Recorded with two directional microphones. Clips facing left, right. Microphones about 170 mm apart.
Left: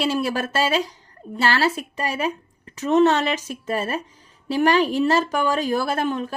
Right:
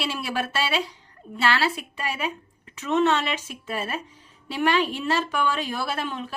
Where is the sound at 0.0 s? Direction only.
40° left (ahead or behind).